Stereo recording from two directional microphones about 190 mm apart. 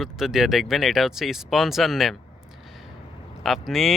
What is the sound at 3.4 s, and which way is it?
Speech, centre (ahead or behind).